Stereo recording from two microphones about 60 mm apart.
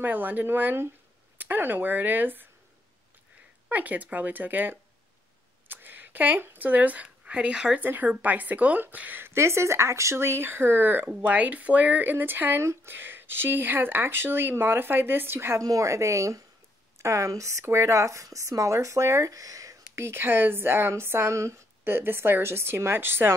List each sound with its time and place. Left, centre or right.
0.0 s speech: right
3.6 s speech: right
7.8 s speech: right
9.2 s speech: right
15.6 s speech: right
20.0 s speech: right